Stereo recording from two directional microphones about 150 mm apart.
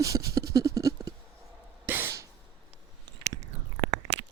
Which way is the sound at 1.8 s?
15° right (ahead or behind).